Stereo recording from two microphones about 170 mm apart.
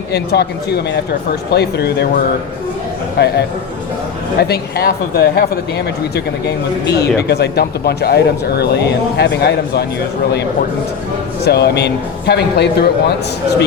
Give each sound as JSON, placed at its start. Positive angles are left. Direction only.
{"t": 0.1, "sound": "speech", "side_deg": 75}
{"t": 4.4, "sound": "speech", "side_deg": 70}
{"t": 6.8, "sound": "speech", "side_deg": 70}
{"t": 11.4, "sound": "speech", "side_deg": 75}